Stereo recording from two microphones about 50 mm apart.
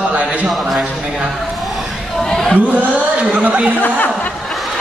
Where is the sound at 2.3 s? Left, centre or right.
Centre.